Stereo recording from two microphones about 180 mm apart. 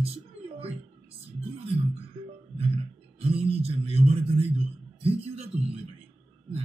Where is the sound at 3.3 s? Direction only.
35° right (ahead or behind).